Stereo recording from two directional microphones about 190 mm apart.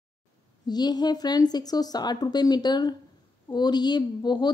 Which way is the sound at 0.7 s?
20° left (ahead or behind).